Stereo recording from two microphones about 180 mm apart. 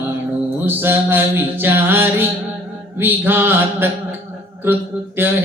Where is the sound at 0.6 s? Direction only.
10° right (ahead or behind).